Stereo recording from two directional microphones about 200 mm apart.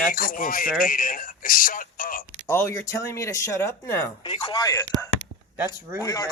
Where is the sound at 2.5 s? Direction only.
15° left (ahead or behind).